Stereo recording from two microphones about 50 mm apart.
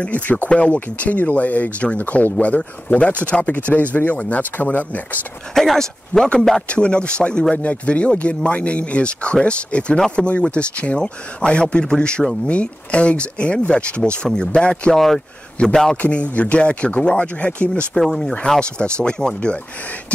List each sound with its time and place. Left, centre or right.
0.0 s speech: left
5.5 s speech: centre
6.7 s speech: left
7.5 s speech: left
9.9 s speech: centre
10.2 s speech: left
15.0 s speech: centre
16.0 s speech: left
18.0 s speech: centre